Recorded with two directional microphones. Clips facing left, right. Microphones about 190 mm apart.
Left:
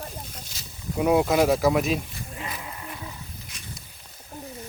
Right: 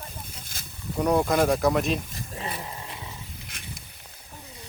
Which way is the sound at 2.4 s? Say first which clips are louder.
Right 2 dB; 30° right (ahead or behind).